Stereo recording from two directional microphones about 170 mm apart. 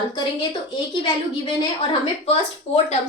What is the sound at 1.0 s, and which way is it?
A woman's voice, 25° left (ahead or behind).